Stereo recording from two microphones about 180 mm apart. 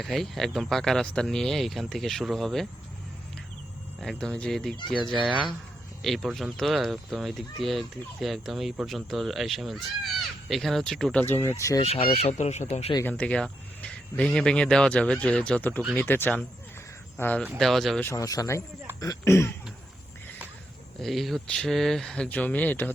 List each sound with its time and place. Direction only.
0.0 s speech: centre (ahead or behind)
4.0 s speech: 5° left (ahead or behind)
11.8 s speech: 30° left (ahead or behind)
12.9 s speech: 15° left (ahead or behind)
18.0 s speech: 15° left (ahead or behind)
21.0 s speech: centre (ahead or behind)